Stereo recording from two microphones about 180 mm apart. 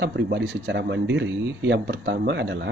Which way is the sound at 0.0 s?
70° right (ahead or behind).